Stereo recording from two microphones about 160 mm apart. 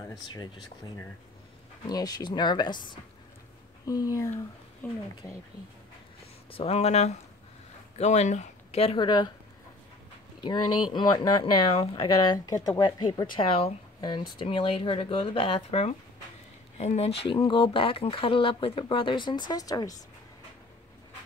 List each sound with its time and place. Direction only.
1.9 s speech: 25° left (ahead or behind)
6.5 s speech: 40° left (ahead or behind)
10.4 s speech: 25° left (ahead or behind)